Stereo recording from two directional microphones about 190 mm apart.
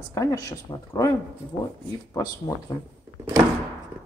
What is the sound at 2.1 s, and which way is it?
Speech, 20° left (ahead or behind).